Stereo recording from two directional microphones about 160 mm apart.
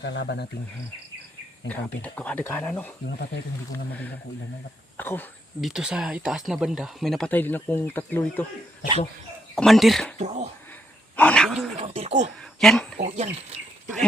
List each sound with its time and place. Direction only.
0.0 s speech: 90° left
1.6 s speech: 10° left (ahead or behind)
4.9 s speech: 10° left (ahead or behind)
5.5 s speech: 5° right (ahead or behind)
9.6 s speech: centre (ahead or behind)
10.2 s speech: 50° right (ahead or behind)
11.2 s speech: 5° left (ahead or behind)
11.8 s speech: 40° right (ahead or behind)
12.4 s a sound: centre (ahead or behind)
13.0 s speech: 40° right (ahead or behind)